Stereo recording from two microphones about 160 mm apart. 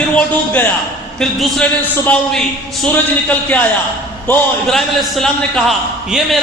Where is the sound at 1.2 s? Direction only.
Centre (ahead or behind).